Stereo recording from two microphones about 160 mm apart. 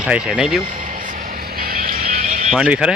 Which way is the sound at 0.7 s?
55° right (ahead or behind).